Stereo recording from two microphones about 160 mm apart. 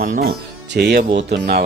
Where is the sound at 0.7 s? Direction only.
85° right.